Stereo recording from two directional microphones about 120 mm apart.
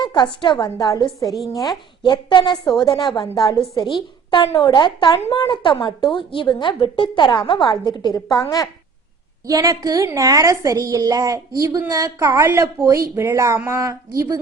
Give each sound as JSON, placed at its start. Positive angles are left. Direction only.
{"t": 0.0, "sound": "a woman's voice", "side_deg": 40}
{"t": 2.0, "sound": "a woman's voice", "side_deg": 40}
{"t": 9.5, "sound": "a woman's voice", "side_deg": -30}